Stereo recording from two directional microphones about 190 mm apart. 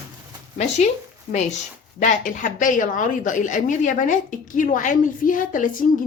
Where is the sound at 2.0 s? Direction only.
45° left (ahead or behind).